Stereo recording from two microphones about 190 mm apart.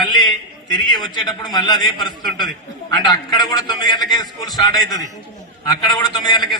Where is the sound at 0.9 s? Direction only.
20° left (ahead or behind).